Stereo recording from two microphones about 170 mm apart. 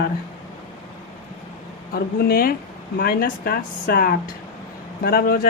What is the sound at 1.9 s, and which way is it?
Speech, 60° left (ahead or behind).